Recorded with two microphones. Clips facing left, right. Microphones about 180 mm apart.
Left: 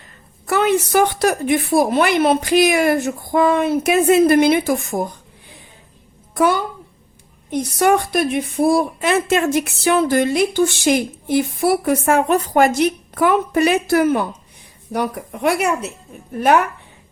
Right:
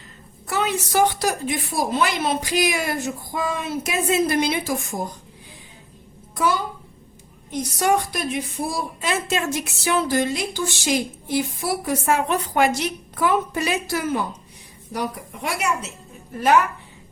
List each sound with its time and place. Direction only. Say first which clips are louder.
0.4 s a woman's voice: left 8 dB; 60° left (ahead or behind)
6.3 s a woman's voice: left 6 dB; 60° left (ahead or behind)